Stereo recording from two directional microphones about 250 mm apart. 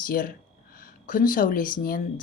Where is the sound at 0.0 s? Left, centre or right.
Left.